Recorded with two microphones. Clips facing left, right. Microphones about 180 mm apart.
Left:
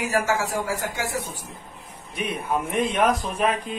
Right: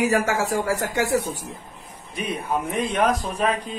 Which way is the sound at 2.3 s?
Centre (ahead or behind).